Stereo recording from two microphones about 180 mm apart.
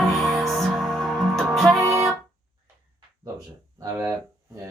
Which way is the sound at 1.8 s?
15° right (ahead or behind).